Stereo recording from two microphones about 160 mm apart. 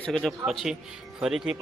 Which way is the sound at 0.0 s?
5° left (ahead or behind).